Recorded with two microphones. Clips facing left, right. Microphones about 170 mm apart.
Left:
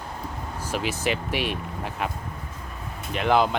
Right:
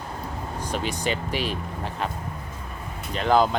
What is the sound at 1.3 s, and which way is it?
Speech, 35° right (ahead or behind).